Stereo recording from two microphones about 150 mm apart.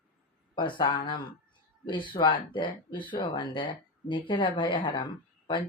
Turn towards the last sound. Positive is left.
turn(degrees=30)  # may be behind; listen again after turning